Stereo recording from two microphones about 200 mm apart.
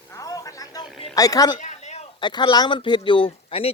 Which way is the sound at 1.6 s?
35° left (ahead or behind).